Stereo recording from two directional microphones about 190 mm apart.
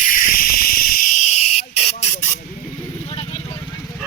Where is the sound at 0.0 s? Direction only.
45° left (ahead or behind).